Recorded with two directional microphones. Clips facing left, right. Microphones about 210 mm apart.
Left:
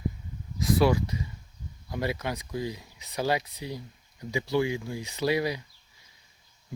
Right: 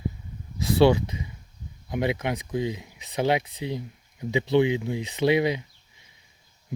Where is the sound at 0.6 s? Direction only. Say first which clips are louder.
Right 4 dB; 25° right (ahead or behind).